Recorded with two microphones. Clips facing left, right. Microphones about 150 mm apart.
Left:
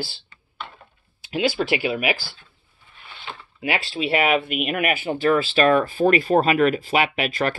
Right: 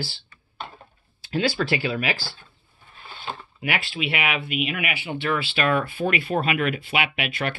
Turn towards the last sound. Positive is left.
turn(degrees=40)  # may be behind; listen again after turning